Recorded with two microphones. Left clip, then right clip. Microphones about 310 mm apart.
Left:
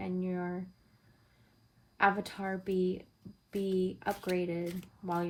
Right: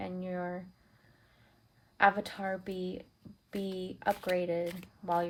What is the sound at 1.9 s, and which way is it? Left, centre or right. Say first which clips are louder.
Speech: right 2 dB; right.